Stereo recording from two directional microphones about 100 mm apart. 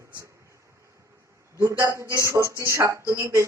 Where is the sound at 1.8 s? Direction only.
30° right (ahead or behind).